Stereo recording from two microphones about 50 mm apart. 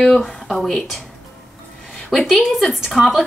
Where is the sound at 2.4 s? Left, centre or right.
Centre.